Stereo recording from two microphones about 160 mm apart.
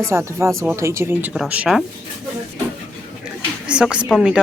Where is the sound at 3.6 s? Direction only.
5° right (ahead or behind).